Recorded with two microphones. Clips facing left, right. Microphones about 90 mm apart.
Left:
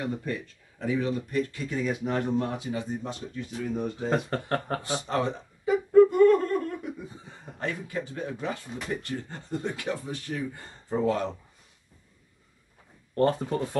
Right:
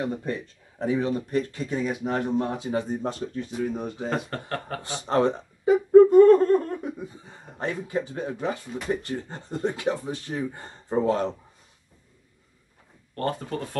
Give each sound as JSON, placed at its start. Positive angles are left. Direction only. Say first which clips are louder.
{"t": 0.0, "sound": "speech", "louder": "right 3 dB", "side_deg": -30}
{"t": 2.7, "sound": "speech", "louder": "right 5 dB", "side_deg": -40}
{"t": 3.7, "sound": "speech", "louder": "left 1 dB", "side_deg": -20}
{"t": 4.3, "sound": "speech", "louder": "left 3 dB", "side_deg": 30}
{"t": 5.0, "sound": "speech", "louder": "right 8 dB", "side_deg": -35}
{"t": 5.9, "sound": "laughter", "louder": "right 5 dB", "side_deg": -30}
{"t": 7.5, "sound": "speech", "louder": "right 4 dB", "side_deg": -25}
{"t": 13.1, "sound": "speech", "louder": "left 4 dB", "side_deg": 25}